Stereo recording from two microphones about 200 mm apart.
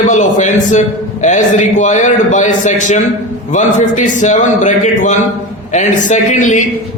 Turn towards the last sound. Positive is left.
turn(degrees=40)  # may be behind; listen again after turning